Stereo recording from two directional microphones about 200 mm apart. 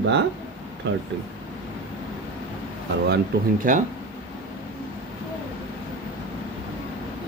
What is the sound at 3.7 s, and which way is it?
Speech, 40° right (ahead or behind).